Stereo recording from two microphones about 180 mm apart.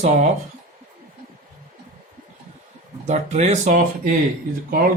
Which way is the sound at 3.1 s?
40° right (ahead or behind).